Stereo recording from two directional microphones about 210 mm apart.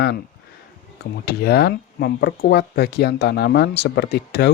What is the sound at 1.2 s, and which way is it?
Speech, 50° left (ahead or behind).